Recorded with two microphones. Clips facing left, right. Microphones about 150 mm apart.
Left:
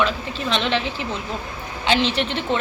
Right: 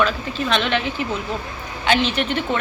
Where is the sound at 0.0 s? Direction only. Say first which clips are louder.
Right 2 dB; 25° left (ahead or behind).